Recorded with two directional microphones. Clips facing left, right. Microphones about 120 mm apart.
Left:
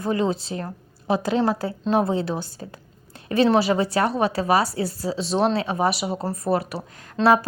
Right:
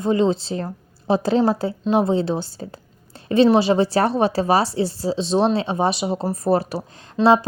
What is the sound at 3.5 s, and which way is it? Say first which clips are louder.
A woman's voice: right 3 dB; 25° right (ahead or behind).